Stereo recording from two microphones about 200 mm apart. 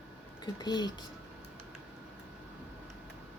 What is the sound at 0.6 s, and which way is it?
Speech, 20° left (ahead or behind).